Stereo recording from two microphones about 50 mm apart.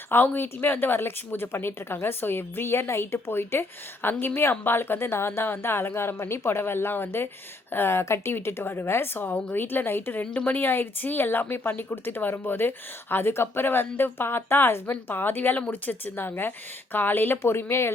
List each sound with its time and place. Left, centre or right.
0.1 s a woman's voice: left
9.2 s a woman's voice: left
15.5 s a woman's voice: left